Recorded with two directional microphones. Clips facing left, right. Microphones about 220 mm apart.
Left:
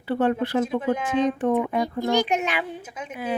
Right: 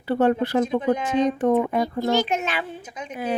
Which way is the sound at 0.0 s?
40° right (ahead or behind).